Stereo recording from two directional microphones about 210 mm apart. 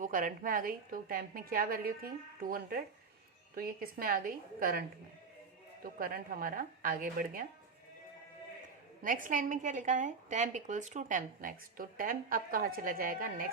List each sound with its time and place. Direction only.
0.0 s a woman's voice: 40° right (ahead or behind)
5.8 s a woman's voice: 45° right (ahead or behind)
9.0 s a woman's voice: 40° right (ahead or behind)